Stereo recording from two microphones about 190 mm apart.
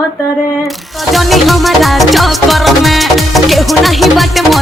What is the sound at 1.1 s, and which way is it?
Music, centre (ahead or behind).